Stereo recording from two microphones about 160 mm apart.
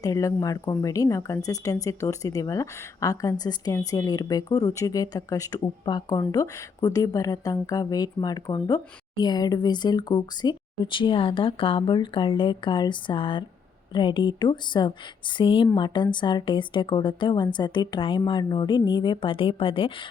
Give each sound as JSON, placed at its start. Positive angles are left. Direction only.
{"t": 0.0, "sound": "speech", "side_deg": 20}